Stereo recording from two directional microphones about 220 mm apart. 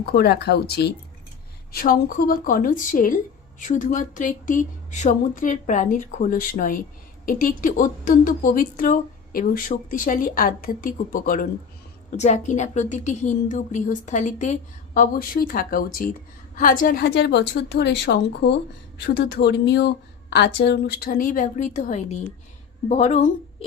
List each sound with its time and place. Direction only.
0.0 s a woman's voice: 45° left (ahead or behind)